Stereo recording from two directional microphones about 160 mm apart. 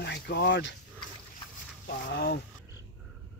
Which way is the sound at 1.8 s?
90° left.